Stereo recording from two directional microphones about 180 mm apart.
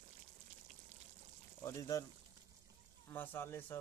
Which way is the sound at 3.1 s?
10° left (ahead or behind).